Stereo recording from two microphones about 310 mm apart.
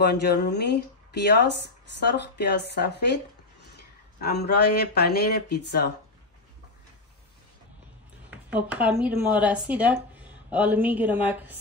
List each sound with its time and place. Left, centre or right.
0.0 s speech: left
4.2 s speech: left
8.5 s speech: centre